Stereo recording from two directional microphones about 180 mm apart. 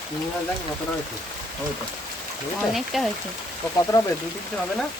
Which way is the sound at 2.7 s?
Centre (ahead or behind).